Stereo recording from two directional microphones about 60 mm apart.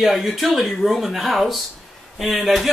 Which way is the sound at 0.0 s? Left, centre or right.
Centre.